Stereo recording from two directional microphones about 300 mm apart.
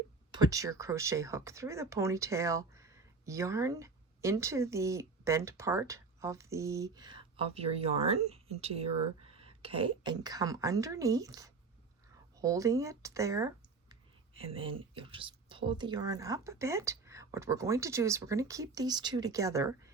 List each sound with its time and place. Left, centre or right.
0.3 s speech: centre